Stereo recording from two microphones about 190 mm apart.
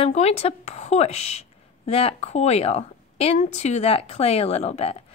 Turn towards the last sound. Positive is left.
turn(degrees=35)  # may be behind; listen again after turning